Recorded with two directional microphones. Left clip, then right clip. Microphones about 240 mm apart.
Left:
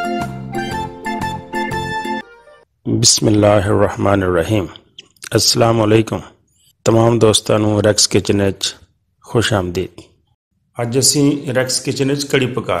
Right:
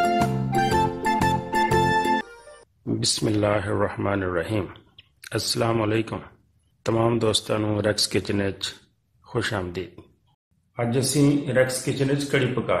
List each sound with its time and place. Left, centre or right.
0.0 s music: centre
3.0 s speech: left